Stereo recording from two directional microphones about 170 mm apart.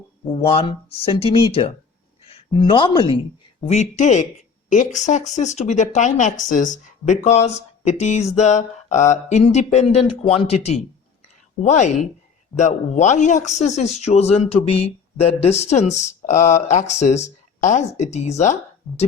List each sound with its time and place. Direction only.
0.3 s a man's voice: 30° left (ahead or behind)
3.7 s a man's voice: 45° left (ahead or behind)